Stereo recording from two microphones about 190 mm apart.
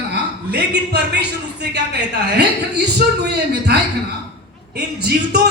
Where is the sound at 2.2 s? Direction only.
60° right (ahead or behind).